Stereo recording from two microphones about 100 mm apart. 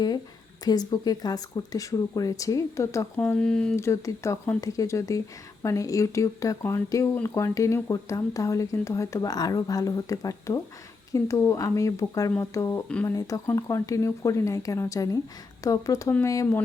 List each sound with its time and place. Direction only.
0.6 s speech: 40° left (ahead or behind)
3.2 s speech: 10° left (ahead or behind)
3.8 s speech: 30° left (ahead or behind)